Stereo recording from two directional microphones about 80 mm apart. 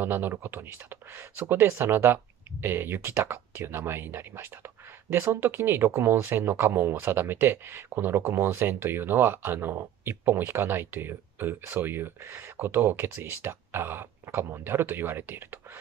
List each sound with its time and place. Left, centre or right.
0.0 s speech: right